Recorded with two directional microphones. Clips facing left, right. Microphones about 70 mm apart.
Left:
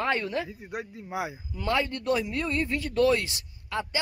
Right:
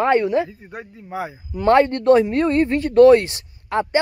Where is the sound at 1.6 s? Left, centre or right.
Right.